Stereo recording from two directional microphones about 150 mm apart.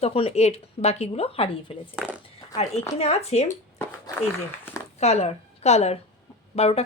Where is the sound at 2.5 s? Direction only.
45° left (ahead or behind).